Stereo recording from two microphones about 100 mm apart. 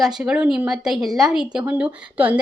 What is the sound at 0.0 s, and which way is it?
A woman's voice, 5° right (ahead or behind).